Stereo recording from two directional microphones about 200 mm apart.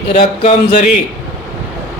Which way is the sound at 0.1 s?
35° left (ahead or behind).